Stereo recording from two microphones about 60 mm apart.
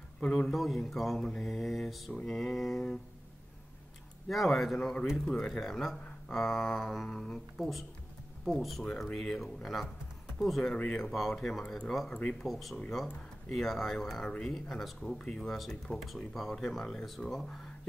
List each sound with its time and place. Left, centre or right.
0.2 s a man's voice: centre
0.5 s speech: centre
4.3 s speech: centre
4.7 s speech: centre
10.7 s speech: centre
11.1 s speech: centre
12.1 s speech: centre
12.4 s speech: centre
15.1 s speech: centre
15.6 s speech: centre